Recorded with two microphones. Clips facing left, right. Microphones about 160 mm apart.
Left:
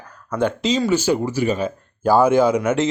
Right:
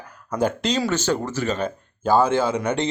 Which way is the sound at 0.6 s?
Centre (ahead or behind).